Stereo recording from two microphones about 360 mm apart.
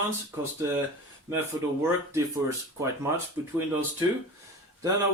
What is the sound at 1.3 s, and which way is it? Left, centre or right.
Speech, centre.